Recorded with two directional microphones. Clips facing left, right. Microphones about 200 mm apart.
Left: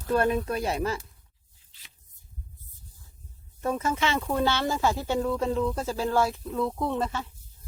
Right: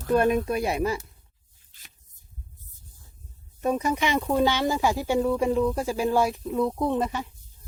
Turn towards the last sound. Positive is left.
turn(degrees=-15)  # may be behind; listen again after turning